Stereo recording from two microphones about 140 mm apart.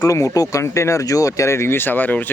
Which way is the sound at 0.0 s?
25° left (ahead or behind).